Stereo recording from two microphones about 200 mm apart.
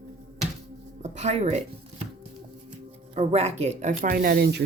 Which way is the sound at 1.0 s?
35° right (ahead or behind).